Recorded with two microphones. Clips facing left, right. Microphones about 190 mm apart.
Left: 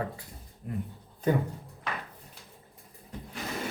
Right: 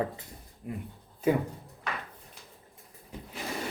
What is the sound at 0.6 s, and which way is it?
Speech, 10° right (ahead or behind).